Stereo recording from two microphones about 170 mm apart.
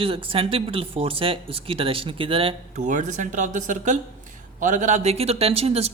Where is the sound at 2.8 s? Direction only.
45° right (ahead or behind).